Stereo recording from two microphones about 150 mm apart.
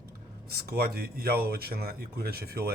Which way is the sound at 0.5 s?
90° right.